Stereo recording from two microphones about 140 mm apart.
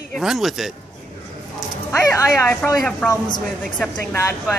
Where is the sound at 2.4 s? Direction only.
10° left (ahead or behind).